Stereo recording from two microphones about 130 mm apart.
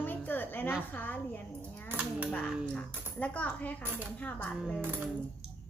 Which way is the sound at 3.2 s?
10° left (ahead or behind).